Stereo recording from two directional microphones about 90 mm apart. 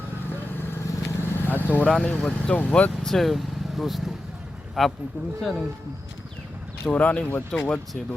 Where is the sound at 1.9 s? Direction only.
5° left (ahead or behind).